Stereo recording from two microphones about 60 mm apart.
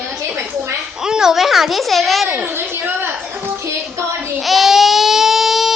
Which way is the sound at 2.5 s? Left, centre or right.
Right.